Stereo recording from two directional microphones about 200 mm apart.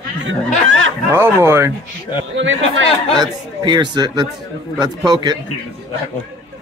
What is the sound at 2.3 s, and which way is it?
Speech, 70° right (ahead or behind).